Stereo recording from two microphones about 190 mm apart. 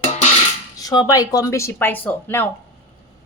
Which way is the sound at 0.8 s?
20° left (ahead or behind).